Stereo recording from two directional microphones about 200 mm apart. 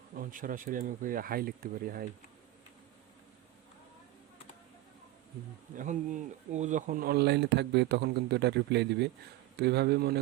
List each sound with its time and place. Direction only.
0.2 s speech: 45° right (ahead or behind)
5.7 s speech: 40° right (ahead or behind)